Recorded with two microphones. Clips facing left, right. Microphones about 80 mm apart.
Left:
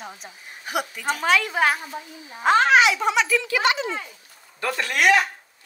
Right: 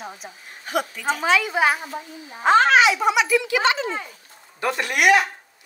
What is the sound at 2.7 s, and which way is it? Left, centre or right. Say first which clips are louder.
Speech: right 1 dB; centre.